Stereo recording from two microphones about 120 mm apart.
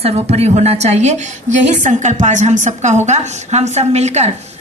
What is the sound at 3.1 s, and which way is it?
A woman's voice, 65° right (ahead or behind).